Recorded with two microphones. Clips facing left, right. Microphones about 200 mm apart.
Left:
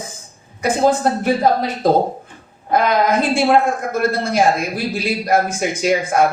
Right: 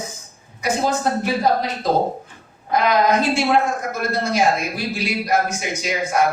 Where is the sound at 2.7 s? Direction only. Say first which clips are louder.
Left 1 dB; 55° left (ahead or behind).